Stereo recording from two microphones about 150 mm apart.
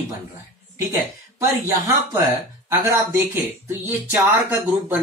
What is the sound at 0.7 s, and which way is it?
Speech, 20° right (ahead or behind).